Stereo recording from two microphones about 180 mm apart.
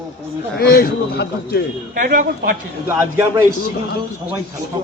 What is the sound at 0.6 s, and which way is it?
Speech, 60° left (ahead or behind).